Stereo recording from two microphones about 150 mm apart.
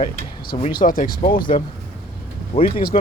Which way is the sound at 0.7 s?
75° left (ahead or behind).